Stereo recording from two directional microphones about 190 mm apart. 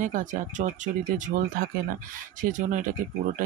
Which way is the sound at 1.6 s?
50° right (ahead or behind).